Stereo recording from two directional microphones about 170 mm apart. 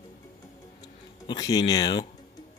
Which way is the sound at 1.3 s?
20° left (ahead or behind).